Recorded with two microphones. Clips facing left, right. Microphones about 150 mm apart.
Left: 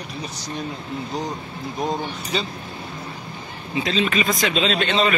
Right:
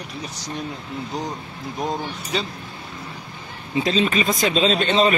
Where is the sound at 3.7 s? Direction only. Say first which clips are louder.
Right 2 dB; 35° right (ahead or behind).